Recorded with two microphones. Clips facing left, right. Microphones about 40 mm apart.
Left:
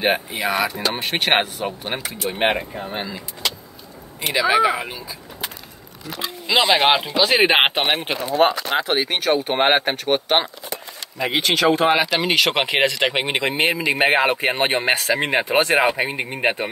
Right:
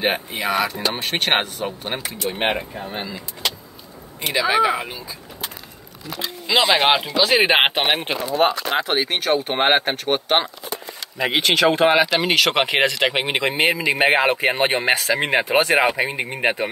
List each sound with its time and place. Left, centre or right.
0.0 s speech: centre
4.2 s speech: centre
6.1 s speech: centre
11.1 s speech: right
11.9 s speech: centre